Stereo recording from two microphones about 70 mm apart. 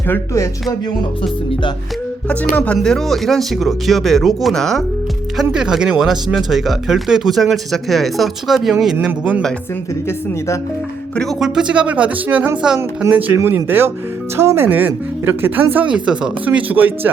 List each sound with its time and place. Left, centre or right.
2.3 s speech: centre
2.7 s speech: centre
5.4 s speech: centre
9.0 s speech: centre
11.3 s speech: centre
13.1 s speech: right
13.3 s speech: right
15.9 s speech: centre